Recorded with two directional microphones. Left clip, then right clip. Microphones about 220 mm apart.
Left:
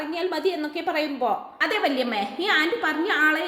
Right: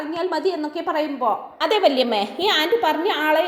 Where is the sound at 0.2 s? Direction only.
10° right (ahead or behind).